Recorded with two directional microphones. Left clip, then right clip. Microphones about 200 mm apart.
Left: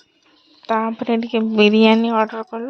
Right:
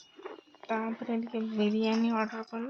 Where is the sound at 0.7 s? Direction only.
50° left (ahead or behind).